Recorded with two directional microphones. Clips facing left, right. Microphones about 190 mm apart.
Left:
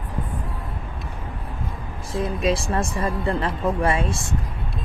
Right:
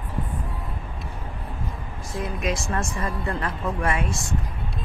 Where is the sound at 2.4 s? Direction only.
30° left (ahead or behind).